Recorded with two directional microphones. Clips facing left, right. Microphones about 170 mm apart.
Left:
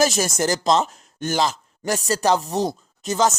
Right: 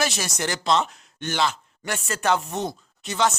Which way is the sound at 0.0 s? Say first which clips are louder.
Left 7 dB; 45° left (ahead or behind).